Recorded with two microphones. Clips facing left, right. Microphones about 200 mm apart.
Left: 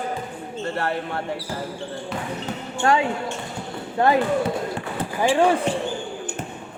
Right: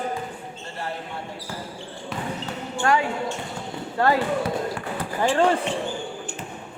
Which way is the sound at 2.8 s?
25° left (ahead or behind).